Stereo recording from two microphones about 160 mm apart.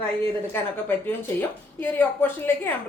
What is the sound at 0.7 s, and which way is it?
A woman's voice, 15° left (ahead or behind).